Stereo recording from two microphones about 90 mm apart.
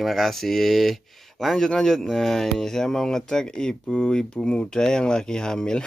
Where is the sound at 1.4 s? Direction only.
5° left (ahead or behind).